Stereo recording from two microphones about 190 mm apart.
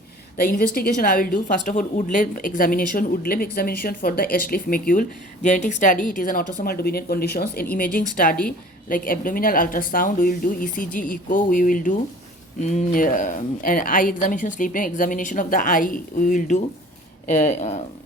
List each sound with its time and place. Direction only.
0.3 s a woman's voice: 50° left (ahead or behind)